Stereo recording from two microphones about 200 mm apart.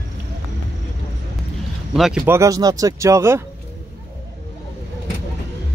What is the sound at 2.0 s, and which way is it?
Speech, centre (ahead or behind).